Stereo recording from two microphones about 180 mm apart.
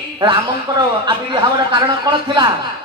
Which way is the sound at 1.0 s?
25° right (ahead or behind).